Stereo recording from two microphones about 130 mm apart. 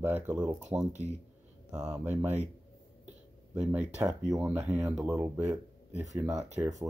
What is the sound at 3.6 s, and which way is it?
Speech, 10° right (ahead or behind).